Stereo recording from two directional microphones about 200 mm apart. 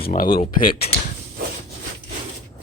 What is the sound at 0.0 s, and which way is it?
Speech, 45° left (ahead or behind).